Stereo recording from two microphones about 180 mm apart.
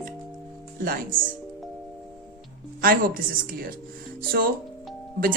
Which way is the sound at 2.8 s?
50° right (ahead or behind).